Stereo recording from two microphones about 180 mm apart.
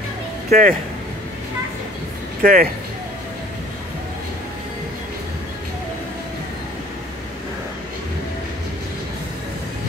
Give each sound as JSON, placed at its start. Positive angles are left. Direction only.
{"t": 0.5, "sound": "speech", "side_deg": -50}
{"t": 2.4, "sound": "speech", "side_deg": -55}